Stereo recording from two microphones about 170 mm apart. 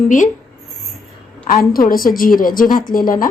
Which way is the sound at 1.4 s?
55° left (ahead or behind).